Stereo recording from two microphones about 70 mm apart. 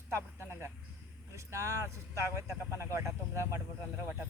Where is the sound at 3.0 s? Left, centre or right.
Right.